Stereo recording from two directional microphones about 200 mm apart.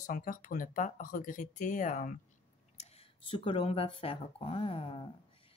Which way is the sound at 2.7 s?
30° left (ahead or behind).